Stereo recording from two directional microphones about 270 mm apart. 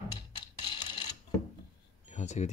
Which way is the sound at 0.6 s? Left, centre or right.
Centre.